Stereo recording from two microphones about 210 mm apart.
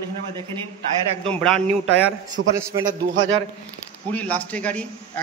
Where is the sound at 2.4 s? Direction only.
60° right (ahead or behind).